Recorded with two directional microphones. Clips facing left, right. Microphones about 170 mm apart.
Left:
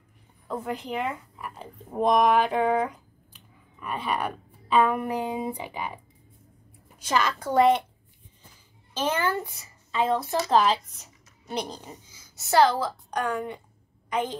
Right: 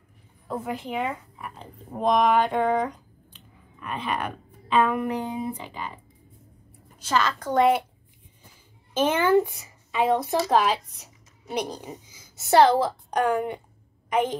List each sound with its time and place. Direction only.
0.5 s speech: 5° right (ahead or behind); by 5.9 s 10° left (ahead or behind)
7.0 s speech: 15° left (ahead or behind)
9.0 s a child's voice: 20° right (ahead or behind)
12.4 s a child's voice: 25° right (ahead or behind)